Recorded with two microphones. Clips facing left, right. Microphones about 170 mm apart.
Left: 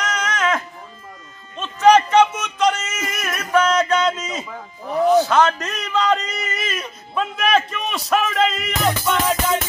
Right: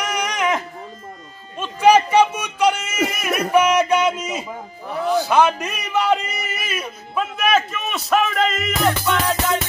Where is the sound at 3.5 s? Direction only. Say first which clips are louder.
Right 1 dB; 15° right (ahead or behind).